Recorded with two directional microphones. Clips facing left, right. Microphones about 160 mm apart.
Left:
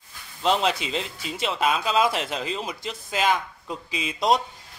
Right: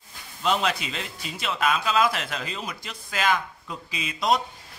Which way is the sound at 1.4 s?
30° left (ahead or behind).